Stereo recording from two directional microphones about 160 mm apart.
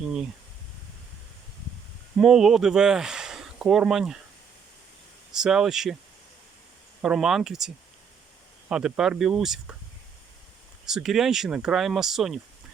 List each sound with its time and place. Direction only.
2.1 s speech: centre (ahead or behind)
5.3 s speech: 5° right (ahead or behind)
7.0 s speech: 5° right (ahead or behind)
8.7 s speech: 5° right (ahead or behind)
10.8 s speech: centre (ahead or behind)